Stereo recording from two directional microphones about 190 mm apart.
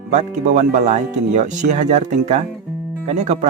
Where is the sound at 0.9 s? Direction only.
40° right (ahead or behind).